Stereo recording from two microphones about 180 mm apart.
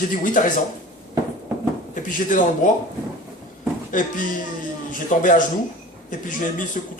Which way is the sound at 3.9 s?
45° left (ahead or behind).